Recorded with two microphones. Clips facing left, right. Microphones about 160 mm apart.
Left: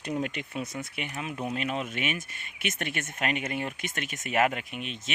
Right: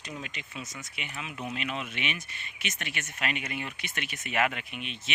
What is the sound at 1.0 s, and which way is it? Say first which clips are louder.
Speech: left 2 dB; 45° left (ahead or behind).